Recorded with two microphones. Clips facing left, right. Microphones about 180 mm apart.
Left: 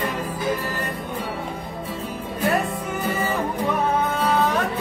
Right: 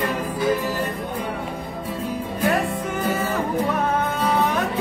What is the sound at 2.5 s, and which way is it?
Music, centre (ahead or behind).